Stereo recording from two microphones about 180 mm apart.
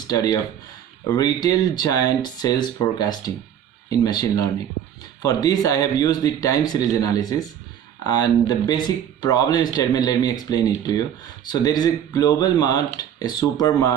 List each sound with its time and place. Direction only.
0.1 s speech: 20° left (ahead or behind)